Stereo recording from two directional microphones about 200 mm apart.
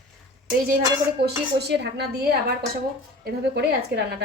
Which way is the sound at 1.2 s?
55° right (ahead or behind).